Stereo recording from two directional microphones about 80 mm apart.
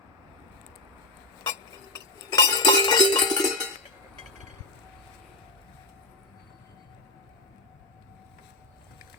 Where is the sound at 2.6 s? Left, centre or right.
Left.